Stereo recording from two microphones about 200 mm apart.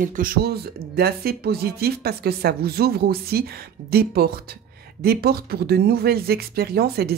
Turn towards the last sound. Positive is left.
turn(degrees=-50)  # may be behind; listen again after turning